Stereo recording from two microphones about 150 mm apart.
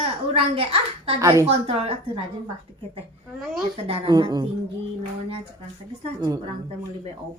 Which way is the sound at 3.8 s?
40° right (ahead or behind).